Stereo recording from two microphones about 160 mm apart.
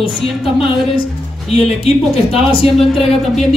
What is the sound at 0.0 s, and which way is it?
Speech, 35° left (ahead or behind).